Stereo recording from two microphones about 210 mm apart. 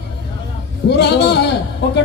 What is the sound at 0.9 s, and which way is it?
Speech, 55° left (ahead or behind).